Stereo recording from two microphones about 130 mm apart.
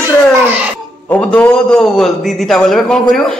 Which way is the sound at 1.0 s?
10° left (ahead or behind).